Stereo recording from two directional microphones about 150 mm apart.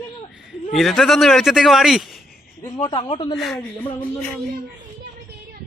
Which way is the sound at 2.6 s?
30° left (ahead or behind).